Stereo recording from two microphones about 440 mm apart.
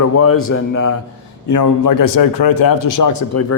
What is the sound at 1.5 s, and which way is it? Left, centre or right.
A man's voice, left.